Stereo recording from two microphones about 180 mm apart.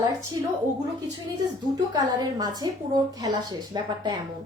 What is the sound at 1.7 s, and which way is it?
A woman's voice, 20° right (ahead or behind).